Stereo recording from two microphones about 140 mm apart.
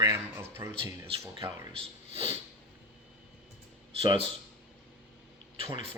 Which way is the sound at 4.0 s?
40° right (ahead or behind).